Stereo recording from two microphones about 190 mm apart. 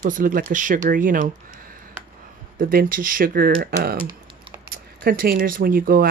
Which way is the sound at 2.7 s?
50° right (ahead or behind).